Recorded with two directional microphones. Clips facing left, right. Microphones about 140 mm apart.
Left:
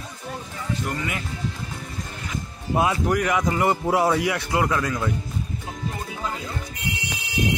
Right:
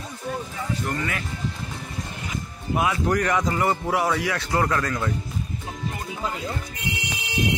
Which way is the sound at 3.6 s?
20° left (ahead or behind).